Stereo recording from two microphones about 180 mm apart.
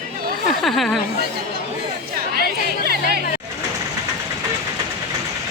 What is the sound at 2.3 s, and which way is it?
Chatter, 55° right (ahead or behind).